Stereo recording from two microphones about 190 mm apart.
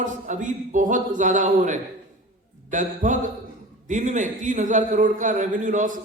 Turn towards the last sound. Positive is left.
turn(degrees=-40)  # may be behind; listen again after turning